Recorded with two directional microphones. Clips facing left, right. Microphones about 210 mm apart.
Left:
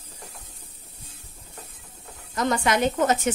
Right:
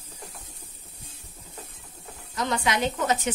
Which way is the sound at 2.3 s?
50° left (ahead or behind).